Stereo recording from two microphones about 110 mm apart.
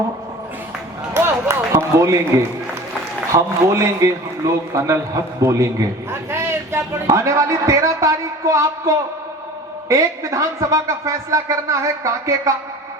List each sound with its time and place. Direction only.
1.1 s run: 20° right (ahead or behind)
3.3 s a man's voice: 25° right (ahead or behind)